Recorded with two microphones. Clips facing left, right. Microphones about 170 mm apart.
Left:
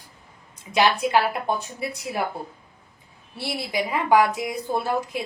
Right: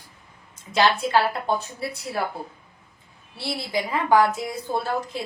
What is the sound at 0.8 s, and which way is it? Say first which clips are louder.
Speech: even; 15° left (ahead or behind).